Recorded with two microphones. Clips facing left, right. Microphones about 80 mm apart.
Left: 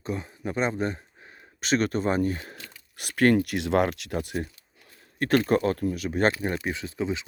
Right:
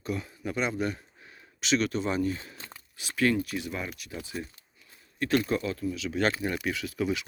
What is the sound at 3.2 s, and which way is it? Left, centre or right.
Speech, left.